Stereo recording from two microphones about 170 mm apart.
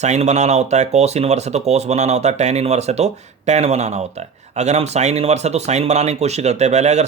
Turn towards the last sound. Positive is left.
turn(degrees=-40)  # may be behind; listen again after turning